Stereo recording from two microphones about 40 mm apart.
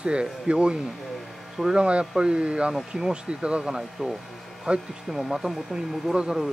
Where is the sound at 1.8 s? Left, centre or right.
Right.